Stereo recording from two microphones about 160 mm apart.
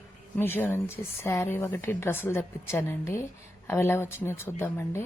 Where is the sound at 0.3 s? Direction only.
15° left (ahead or behind).